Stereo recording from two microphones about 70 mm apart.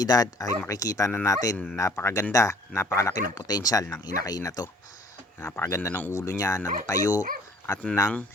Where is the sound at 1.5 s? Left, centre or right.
Centre.